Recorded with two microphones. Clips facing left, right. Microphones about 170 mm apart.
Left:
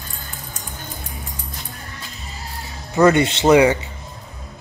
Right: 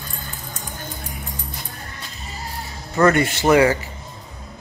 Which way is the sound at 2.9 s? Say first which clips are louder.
Left 2 dB; 20° left (ahead or behind).